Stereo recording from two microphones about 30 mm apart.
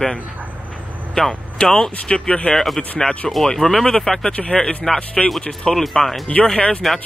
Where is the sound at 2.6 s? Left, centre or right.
Centre.